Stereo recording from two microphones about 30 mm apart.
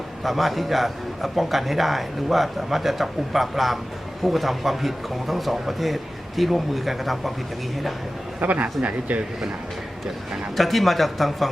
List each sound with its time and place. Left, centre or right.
0.2 s a man's voice: centre
8.4 s speech: right
10.6 s a man's voice: centre